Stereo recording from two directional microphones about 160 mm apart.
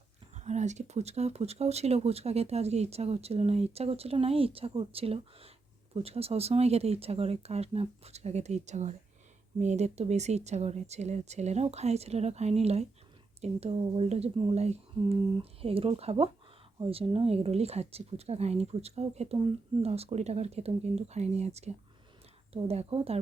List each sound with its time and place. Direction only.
0.3 s speech: 45° right (ahead or behind)